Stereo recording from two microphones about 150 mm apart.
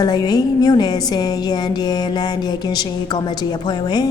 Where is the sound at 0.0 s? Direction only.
30° left (ahead or behind).